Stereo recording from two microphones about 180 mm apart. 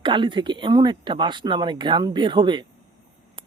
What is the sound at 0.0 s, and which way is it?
Speech, 25° right (ahead or behind).